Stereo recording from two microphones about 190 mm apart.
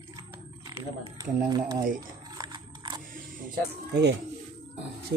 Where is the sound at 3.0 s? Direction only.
45° right (ahead or behind).